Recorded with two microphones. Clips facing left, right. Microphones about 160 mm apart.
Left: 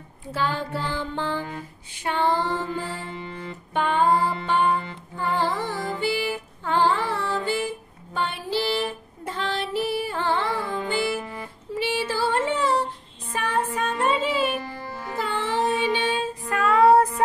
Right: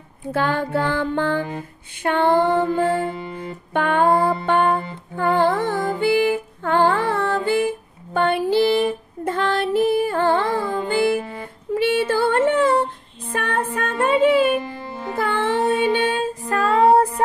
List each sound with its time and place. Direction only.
0.3 s music: 55° right (ahead or behind)
3.1 s music: 35° right (ahead or behind)
3.7 s music: 55° right (ahead or behind)
11.7 s female singing: 55° right (ahead or behind)
13.3 s music: 55° right (ahead or behind)
14.6 s music: 20° right (ahead or behind)
15.1 s music: 55° right (ahead or behind)
16.5 s music: 30° right (ahead or behind)